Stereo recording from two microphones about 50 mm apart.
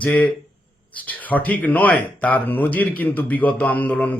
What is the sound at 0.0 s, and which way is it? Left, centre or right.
A man's voice, left.